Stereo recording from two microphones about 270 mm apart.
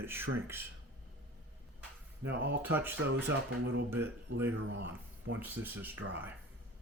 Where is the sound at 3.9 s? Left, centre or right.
Centre.